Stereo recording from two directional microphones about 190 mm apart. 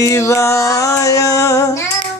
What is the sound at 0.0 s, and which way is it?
Music, 15° left (ahead or behind).